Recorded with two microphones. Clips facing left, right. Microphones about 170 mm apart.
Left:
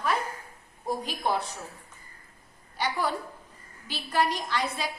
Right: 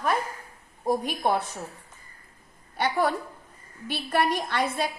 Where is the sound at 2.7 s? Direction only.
55° right (ahead or behind).